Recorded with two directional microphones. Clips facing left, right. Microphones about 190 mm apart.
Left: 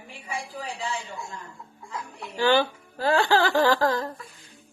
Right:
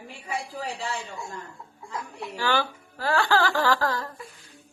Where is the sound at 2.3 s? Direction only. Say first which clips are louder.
Left 5 dB; 20° left (ahead or behind).